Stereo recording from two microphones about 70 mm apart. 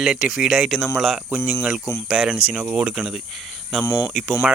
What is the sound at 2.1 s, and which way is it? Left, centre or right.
Speech, centre.